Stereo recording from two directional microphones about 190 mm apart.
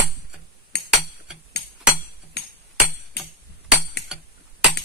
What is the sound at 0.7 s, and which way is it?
Chink, 60° left (ahead or behind).